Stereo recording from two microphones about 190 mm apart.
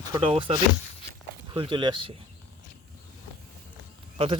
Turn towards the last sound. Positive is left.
turn(degrees=-30)  # may be behind; listen again after turning